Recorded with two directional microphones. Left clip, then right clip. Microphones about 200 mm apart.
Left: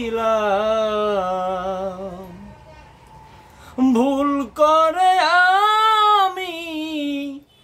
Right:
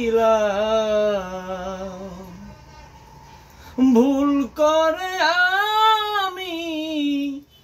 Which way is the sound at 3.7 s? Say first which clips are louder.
Right 1 dB; 20° left (ahead or behind).